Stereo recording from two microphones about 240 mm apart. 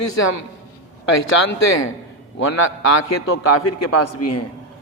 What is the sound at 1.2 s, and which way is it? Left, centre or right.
A man's voice, left.